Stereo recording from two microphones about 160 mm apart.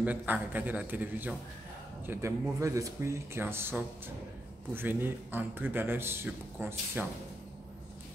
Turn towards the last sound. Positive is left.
turn(degrees=-10)  # may be behind; listen again after turning